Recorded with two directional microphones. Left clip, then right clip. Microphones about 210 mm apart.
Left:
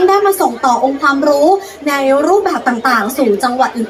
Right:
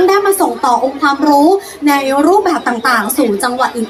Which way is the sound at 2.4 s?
20° right (ahead or behind).